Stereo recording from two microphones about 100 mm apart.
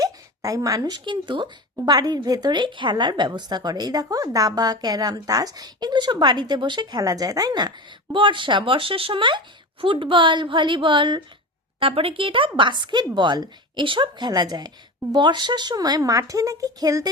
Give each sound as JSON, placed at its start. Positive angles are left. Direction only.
{"t": 0.0, "sound": "speech", "side_deg": -35}
{"t": 1.7, "sound": "a woman's voice", "side_deg": -40}
{"t": 8.1, "sound": "a woman's voice", "side_deg": -55}
{"t": 11.8, "sound": "a woman's voice", "side_deg": -65}